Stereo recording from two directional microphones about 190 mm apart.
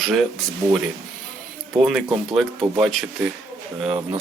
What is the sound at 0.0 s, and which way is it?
Speech, centre (ahead or behind).